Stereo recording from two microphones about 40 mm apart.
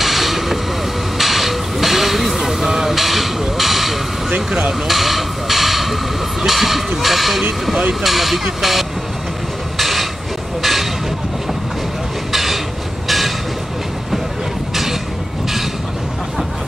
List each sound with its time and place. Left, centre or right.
0.0 s vehicle: centre
1.1 s music: centre
4.5 s speech: centre
4.8 s hiss: centre
6.4 s a sound: centre
8.0 s speech: centre
9.8 s a sound: centre
10.6 s vehicle: centre
12.3 s vehicle: centre